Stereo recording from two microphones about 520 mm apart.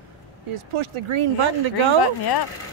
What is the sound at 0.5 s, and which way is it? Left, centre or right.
Speech, right.